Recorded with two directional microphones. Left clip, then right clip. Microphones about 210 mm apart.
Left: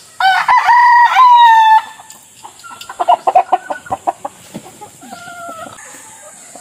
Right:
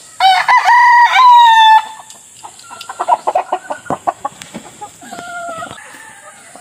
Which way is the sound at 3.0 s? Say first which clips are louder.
Left 3 dB; centre (ahead or behind).